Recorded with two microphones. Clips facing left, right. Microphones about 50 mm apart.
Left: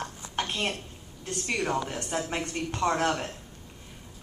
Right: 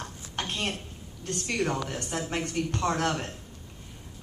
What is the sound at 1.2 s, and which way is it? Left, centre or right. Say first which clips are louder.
Speech: right 1 dB; centre.